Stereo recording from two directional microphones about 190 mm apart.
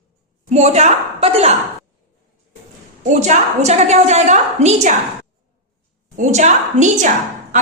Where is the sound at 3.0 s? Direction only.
40° right (ahead or behind).